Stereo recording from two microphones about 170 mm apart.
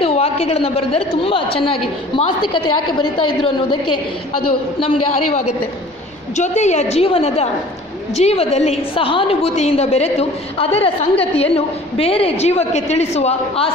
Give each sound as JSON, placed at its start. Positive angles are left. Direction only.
{"t": 0.0, "sound": "a woman's voice", "side_deg": 35}
{"t": 4.7, "sound": "a woman's voice", "side_deg": 35}